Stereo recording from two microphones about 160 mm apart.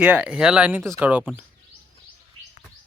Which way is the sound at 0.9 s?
10° right (ahead or behind).